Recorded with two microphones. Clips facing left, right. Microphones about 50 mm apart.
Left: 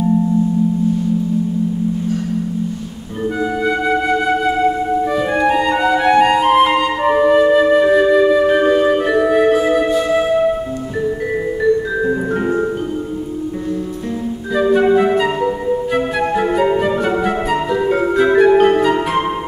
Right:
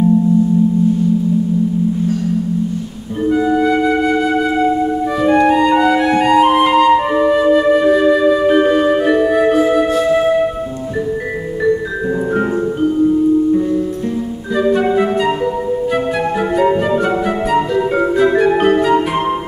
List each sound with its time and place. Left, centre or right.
3.3 s music: centre
6.3 s flute: centre
9.3 s music: centre
14.5 s flute: centre
15.9 s music: centre